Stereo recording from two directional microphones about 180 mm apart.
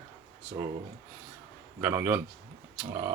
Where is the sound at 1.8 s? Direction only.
10° right (ahead or behind).